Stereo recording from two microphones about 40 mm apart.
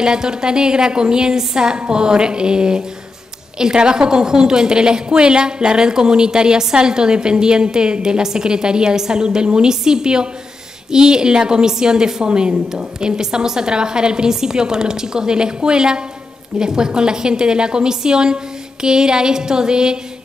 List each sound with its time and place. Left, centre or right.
0.0 s a woman's voice: centre